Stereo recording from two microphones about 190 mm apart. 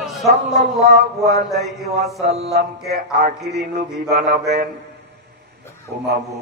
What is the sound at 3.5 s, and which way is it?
Mantra, 50° right (ahead or behind).